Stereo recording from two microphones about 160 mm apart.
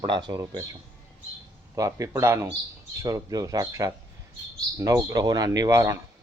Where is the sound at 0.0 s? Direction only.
30° right (ahead or behind).